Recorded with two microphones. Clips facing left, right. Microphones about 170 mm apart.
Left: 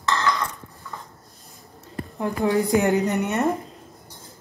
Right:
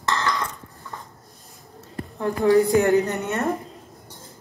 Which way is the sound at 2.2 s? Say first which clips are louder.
Right 4 dB; 20° left (ahead or behind).